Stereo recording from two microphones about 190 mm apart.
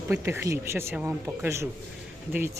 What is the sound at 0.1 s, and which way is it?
Speech, 10° right (ahead or behind).